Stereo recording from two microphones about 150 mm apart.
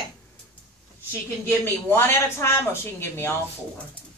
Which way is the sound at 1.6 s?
15° left (ahead or behind).